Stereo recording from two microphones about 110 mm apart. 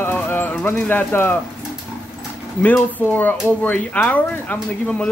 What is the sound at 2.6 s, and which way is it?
Speech, 15° left (ahead or behind).